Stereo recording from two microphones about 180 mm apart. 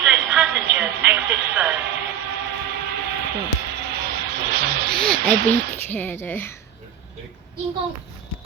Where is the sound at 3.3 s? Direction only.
70° right (ahead or behind).